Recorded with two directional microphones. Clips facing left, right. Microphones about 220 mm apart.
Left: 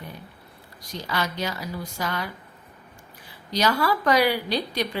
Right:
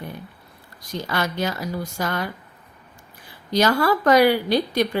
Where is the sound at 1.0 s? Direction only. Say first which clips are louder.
Right 3 dB; 50° right (ahead or behind).